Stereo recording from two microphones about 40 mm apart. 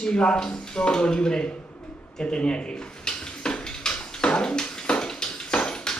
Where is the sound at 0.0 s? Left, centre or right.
Left.